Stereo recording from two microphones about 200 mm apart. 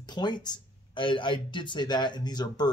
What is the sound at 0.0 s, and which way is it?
Speech, 20° left (ahead or behind).